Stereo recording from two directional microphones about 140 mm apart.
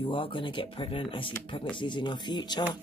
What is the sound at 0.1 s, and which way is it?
Speech, 35° left (ahead or behind).